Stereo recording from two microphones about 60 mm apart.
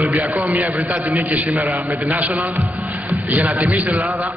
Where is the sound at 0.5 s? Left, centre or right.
Right.